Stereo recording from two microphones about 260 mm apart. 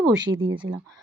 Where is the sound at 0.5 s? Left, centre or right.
Centre.